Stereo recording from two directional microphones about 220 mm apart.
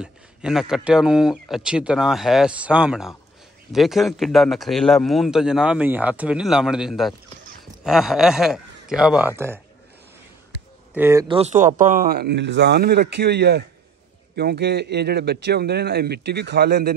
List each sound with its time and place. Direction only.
0.0 s a man's voice: 5° right (ahead or behind)
11.0 s speech: 10° right (ahead or behind)
11.2 s a man's voice: 30° right (ahead or behind); by 16.9 s 45° right (ahead or behind)